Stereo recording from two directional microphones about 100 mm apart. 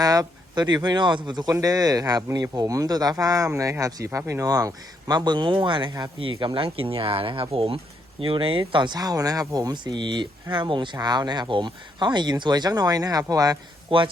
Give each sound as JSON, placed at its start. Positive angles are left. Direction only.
{"t": 0.0, "sound": "speech", "side_deg": -40}